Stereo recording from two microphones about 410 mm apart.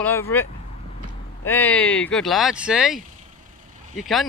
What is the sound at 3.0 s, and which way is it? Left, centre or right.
Vehicle, centre.